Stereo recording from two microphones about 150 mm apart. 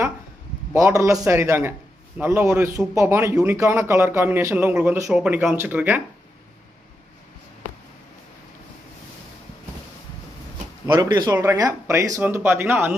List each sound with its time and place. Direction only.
0.7 s a man's voice: 20° right (ahead or behind)
10.9 s a man's voice: 25° right (ahead or behind)